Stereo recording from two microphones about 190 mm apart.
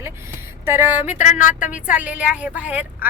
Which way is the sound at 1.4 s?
45° left (ahead or behind).